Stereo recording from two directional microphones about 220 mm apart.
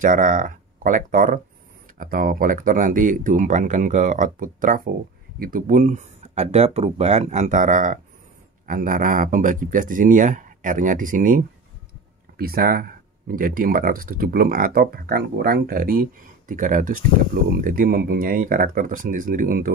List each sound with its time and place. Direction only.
0.0 s speech: 35° right (ahead or behind)